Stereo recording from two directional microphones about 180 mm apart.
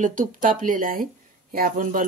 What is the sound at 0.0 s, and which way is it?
Speech, 45° right (ahead or behind).